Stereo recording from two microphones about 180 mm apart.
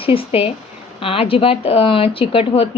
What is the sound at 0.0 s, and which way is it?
Speech, 30° left (ahead or behind).